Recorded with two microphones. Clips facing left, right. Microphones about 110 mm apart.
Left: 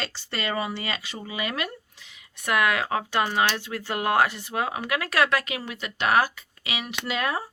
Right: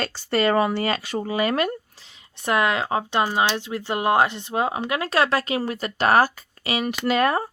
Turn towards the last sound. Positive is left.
turn(degrees=-50)  # may be behind; listen again after turning